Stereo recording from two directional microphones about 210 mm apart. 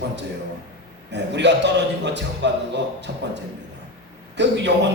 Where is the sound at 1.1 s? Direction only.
55° right (ahead or behind).